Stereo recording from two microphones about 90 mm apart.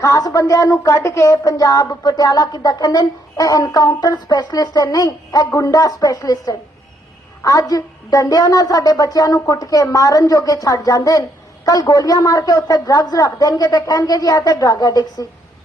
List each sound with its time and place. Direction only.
0.0 s a woman's voice: 40° left (ahead or behind)